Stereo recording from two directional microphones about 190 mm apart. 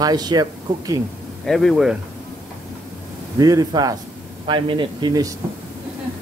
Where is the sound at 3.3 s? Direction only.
20° right (ahead or behind).